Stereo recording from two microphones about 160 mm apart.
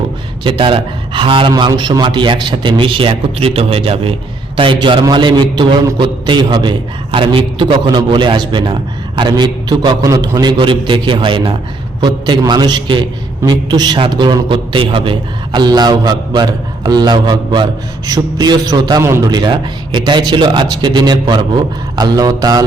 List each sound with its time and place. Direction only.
0.4 s a man's voice: 35° right (ahead or behind)